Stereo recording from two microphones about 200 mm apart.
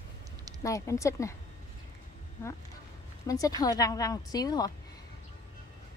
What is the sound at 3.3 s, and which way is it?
A woman's voice, 15° left (ahead or behind).